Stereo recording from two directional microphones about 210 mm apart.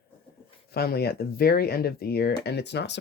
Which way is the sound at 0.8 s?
50° left (ahead or behind).